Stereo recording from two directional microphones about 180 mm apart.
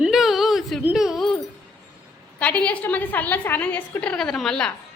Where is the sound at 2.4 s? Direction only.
5° left (ahead or behind).